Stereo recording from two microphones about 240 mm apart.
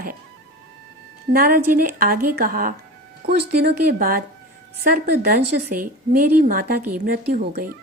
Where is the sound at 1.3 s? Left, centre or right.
Right.